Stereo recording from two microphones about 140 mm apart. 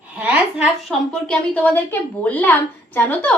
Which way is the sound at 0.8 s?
5° left (ahead or behind).